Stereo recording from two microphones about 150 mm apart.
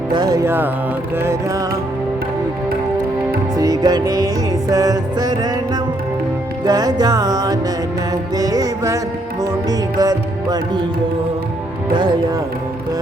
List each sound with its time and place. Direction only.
0.1 s music: 25° right (ahead or behind)
3.6 s music: 25° right (ahead or behind)
6.7 s music: 25° right (ahead or behind)